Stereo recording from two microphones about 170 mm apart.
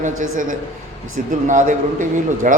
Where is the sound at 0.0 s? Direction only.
50° right (ahead or behind).